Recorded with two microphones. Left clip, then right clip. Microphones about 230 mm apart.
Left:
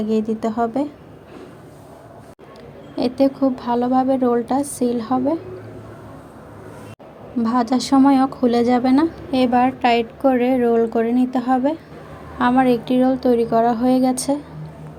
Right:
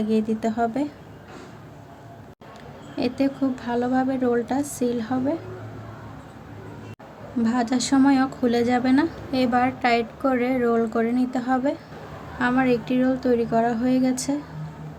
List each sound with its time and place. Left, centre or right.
0.0 s speech: centre
2.9 s speech: centre
7.4 s speech: centre